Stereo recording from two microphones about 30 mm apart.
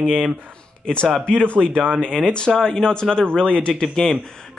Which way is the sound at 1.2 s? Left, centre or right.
Left.